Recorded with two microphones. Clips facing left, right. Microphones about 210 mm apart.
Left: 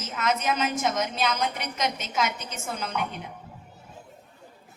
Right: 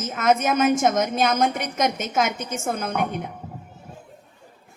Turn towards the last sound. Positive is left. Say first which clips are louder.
# right 6 dB
turn(degrees=-50)  # may be behind; listen again after turning